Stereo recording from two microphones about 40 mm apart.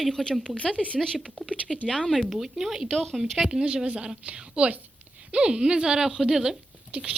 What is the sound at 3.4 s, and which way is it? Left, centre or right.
Speech, centre.